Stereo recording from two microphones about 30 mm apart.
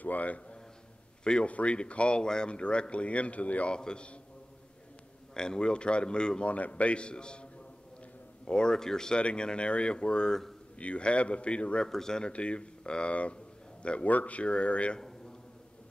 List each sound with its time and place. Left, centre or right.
0.0 s a sound: left
1.4 s speech: left
3.6 s speech: left
5.3 s speech: left
6.4 s a man's voice: left
8.5 s speech: left
9.1 s speech: left
10.8 s speech: left
11.8 s speech: centre
12.3 s speech: left
13.1 s a man's voice: left